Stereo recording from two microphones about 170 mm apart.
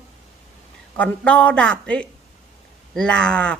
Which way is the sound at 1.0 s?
10° left (ahead or behind).